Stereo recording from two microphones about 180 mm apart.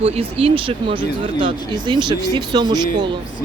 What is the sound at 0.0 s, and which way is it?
Speech, 35° right (ahead or behind).